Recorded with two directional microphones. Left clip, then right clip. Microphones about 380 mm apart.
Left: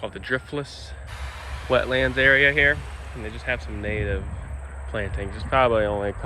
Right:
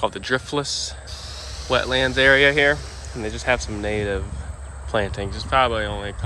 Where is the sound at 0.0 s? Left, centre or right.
Centre.